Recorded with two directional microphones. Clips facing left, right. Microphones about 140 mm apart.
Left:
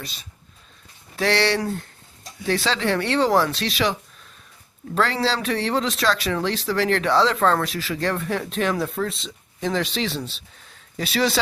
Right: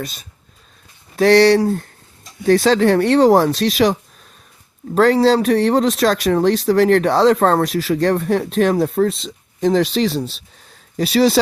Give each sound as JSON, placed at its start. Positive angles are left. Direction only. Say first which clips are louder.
{"t": 1.1, "sound": "speech", "louder": "right 10 dB", "side_deg": -40}
{"t": 4.9, "sound": "speech", "louder": "right 10 dB", "side_deg": -45}